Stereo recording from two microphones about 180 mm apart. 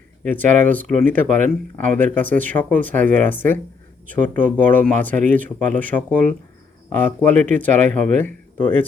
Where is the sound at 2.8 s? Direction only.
45° right (ahead or behind).